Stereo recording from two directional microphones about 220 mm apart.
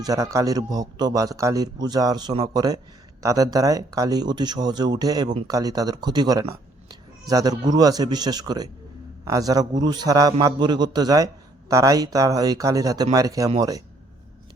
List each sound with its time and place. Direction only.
0.0 s a man's voice: 15° right (ahead or behind)